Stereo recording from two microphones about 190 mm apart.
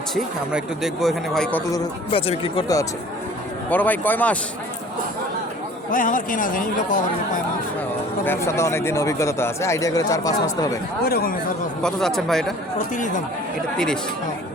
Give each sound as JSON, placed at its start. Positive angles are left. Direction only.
{"t": 0.1, "sound": "speech", "side_deg": 0}
{"t": 1.8, "sound": "speech", "side_deg": 30}
{"t": 3.7, "sound": "speech", "side_deg": 10}
{"t": 5.9, "sound": "speech", "side_deg": 45}
{"t": 8.2, "sound": "speech", "side_deg": 10}
{"t": 11.0, "sound": "speech", "side_deg": 50}
{"t": 11.8, "sound": "speech", "side_deg": 5}
{"t": 13.7, "sound": "speech", "side_deg": 5}